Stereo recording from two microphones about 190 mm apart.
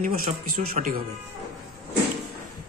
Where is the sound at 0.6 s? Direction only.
45° right (ahead or behind).